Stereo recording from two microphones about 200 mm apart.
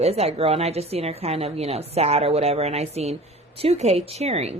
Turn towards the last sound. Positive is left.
turn(degrees=-30)  # may be behind; listen again after turning